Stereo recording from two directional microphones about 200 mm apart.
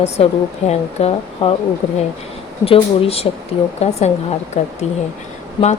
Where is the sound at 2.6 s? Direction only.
30° left (ahead or behind).